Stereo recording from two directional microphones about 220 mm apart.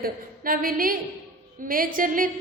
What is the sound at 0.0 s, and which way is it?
A woman's voice, 40° right (ahead or behind).